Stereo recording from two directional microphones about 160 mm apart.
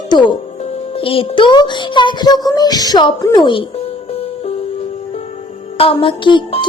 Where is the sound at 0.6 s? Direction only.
40° left (ahead or behind).